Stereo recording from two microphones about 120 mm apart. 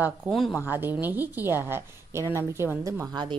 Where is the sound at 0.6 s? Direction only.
15° right (ahead or behind).